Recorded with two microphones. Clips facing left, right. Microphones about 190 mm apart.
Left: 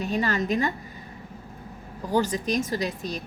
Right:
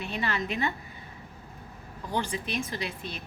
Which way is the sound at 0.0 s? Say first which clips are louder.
Left 6 dB; 40° left (ahead or behind).